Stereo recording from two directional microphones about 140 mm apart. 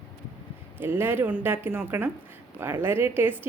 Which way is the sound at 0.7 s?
15° right (ahead or behind).